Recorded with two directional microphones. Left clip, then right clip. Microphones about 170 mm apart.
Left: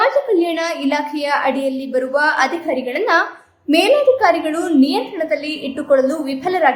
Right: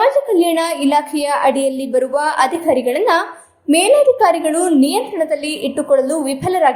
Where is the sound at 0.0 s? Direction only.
20° right (ahead or behind).